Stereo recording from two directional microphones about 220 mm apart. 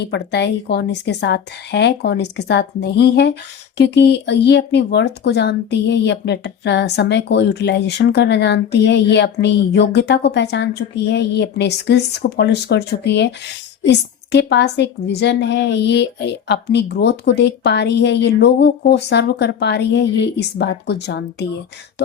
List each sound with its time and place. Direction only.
0.0 s speech: 50° left (ahead or behind)